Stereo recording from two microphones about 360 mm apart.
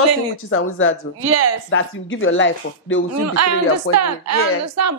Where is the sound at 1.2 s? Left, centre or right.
Right.